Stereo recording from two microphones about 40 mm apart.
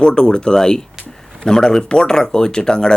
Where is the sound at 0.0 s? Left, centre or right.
Centre.